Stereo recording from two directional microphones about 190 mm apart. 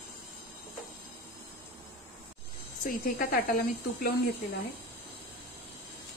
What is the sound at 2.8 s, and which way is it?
Speech, 50° left (ahead or behind).